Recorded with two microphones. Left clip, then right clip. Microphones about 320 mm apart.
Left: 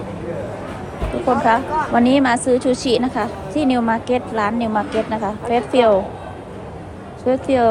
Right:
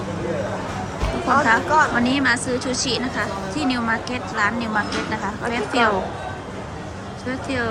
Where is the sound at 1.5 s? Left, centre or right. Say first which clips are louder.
Even; centre.